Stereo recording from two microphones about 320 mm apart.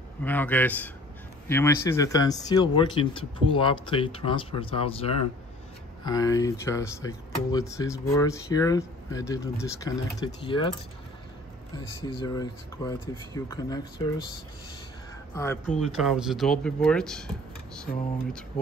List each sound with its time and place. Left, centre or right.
0.2 s speech: centre
15.3 s speech: centre
17.9 s speech: left